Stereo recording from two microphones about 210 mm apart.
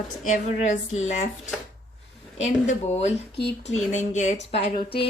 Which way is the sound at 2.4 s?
35° left (ahead or behind).